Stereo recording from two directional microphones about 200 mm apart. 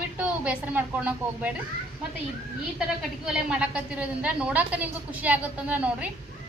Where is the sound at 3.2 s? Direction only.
5° right (ahead or behind).